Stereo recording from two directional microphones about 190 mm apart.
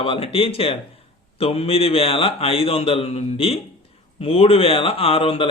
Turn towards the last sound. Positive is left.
turn(degrees=30)  # may be behind; listen again after turning